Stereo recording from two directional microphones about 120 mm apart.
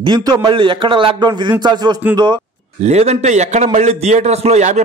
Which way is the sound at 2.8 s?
65° right (ahead or behind).